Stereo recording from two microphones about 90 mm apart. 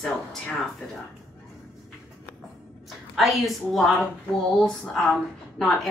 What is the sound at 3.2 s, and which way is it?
Speech, centre (ahead or behind).